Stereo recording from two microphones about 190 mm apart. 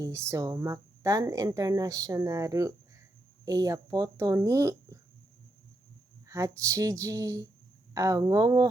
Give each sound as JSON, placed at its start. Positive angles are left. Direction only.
{"t": 0.0, "sound": "speech", "side_deg": -15}
{"t": 6.2, "sound": "speech", "side_deg": -15}